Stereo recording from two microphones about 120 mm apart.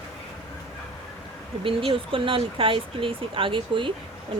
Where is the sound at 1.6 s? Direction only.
45° right (ahead or behind).